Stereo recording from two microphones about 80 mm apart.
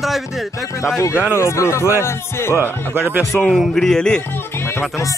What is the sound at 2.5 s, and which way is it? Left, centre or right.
Speech, right.